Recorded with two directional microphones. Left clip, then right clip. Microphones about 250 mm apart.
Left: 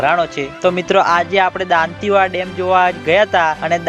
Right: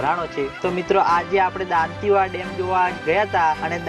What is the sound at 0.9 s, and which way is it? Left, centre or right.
Speech, left.